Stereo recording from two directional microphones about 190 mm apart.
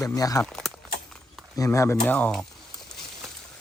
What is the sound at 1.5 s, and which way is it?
Speech, 15° left (ahead or behind).